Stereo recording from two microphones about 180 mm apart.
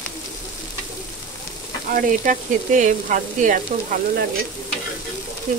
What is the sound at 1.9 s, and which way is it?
Frying, 50° right (ahead or behind).